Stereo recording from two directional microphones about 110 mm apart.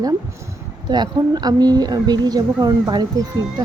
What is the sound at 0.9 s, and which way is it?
Speech, 40° right (ahead or behind).